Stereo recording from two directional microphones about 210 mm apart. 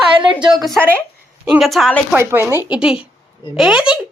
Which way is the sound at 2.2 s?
10° right (ahead or behind).